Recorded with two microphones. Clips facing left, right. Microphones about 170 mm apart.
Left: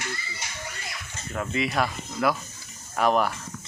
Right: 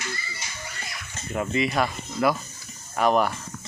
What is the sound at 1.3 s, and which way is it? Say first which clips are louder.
Speech: right 2 dB; centre (ahead or behind).